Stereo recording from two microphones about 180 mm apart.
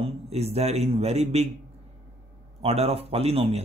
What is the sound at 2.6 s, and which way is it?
Speech, 35° right (ahead or behind).